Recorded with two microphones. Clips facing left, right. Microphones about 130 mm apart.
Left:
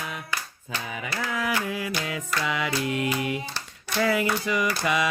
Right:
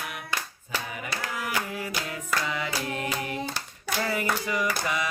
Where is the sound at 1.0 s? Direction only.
90° left.